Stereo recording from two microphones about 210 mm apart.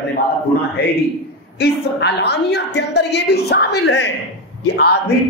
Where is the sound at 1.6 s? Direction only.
55° left (ahead or behind).